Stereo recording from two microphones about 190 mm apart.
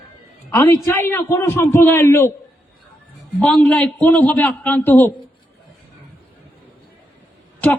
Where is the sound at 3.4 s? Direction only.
5° left (ahead or behind).